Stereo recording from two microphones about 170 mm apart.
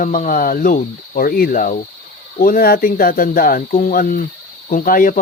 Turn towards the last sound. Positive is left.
turn(degrees=55)  # may be behind; listen again after turning